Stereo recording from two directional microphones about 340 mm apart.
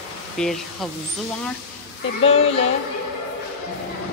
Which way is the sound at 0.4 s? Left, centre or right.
Centre.